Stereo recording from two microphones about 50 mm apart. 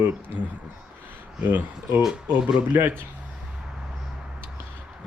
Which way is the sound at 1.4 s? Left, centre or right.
Right.